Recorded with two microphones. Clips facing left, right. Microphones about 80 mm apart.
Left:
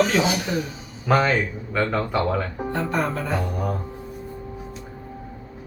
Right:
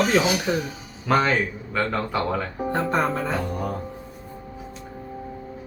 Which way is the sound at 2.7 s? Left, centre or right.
Right.